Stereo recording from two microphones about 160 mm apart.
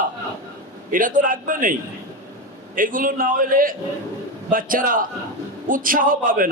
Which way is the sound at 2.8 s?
60° right (ahead or behind).